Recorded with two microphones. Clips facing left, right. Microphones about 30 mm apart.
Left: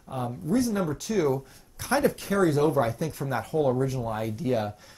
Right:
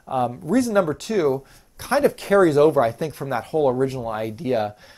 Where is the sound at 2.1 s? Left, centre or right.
Right.